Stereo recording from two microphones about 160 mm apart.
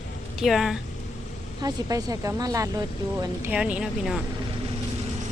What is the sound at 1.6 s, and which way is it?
Speech, 25° right (ahead or behind).